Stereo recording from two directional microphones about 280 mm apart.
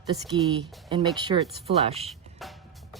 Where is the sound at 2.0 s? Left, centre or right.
Centre.